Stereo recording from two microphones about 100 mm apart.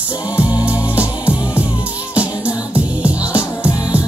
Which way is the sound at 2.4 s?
30° left (ahead or behind).